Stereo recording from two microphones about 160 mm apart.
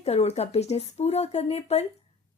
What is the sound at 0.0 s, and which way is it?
A woman's voice, 40° left (ahead or behind).